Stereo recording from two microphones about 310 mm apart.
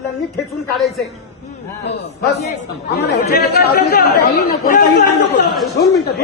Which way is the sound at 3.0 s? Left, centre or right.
Left.